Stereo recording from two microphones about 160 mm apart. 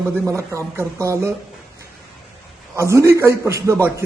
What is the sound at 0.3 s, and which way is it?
A man's voice, 20° right (ahead or behind).